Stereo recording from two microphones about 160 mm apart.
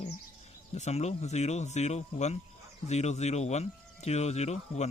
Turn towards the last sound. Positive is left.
turn(degrees=45)  # may be behind; listen again after turning